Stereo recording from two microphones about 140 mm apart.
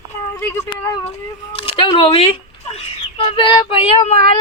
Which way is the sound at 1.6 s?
35° left (ahead or behind).